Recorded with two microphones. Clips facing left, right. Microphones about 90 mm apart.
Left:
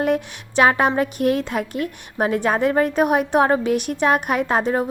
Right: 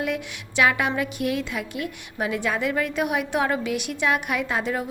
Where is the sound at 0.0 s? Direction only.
40° left (ahead or behind).